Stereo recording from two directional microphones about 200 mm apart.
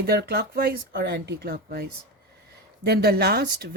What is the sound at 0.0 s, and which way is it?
Speech, 50° right (ahead or behind).